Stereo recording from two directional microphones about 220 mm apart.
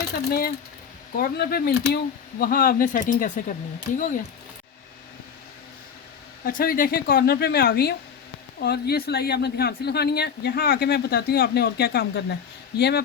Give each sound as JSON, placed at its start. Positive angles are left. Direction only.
{"t": 0.1, "sound": "speech", "side_deg": 45}
{"t": 6.4, "sound": "speech", "side_deg": 40}